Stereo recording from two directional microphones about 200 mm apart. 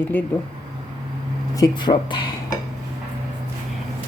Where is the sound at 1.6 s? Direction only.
20° left (ahead or behind).